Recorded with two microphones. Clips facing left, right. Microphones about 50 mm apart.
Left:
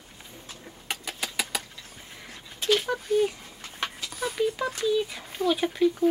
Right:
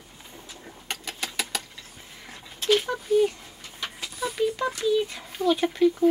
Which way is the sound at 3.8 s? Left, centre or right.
Left.